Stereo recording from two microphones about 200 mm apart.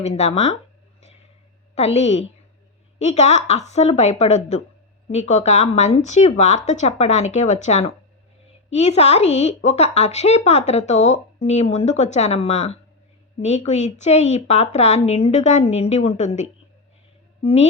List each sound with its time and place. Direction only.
0.0 s speech: 35° left (ahead or behind)
1.7 s speech: 35° left (ahead or behind)